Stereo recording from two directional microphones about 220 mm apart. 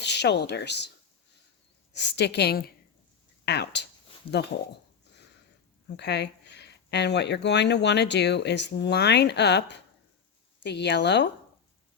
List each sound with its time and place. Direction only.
0.0 s a woman's voice: 50° left (ahead or behind)
6.0 s speech: 50° left (ahead or behind)